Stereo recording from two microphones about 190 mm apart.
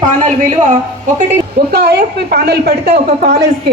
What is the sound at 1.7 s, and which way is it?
A woman's voice, 55° right (ahead or behind).